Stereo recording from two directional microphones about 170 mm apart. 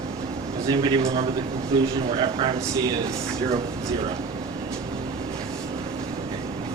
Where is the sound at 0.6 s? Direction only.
20° right (ahead or behind).